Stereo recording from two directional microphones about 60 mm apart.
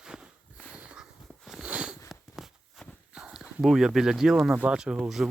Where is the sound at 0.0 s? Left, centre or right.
Centre.